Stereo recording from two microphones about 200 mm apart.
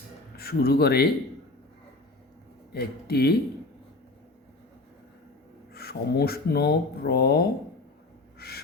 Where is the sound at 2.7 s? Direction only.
50° left (ahead or behind).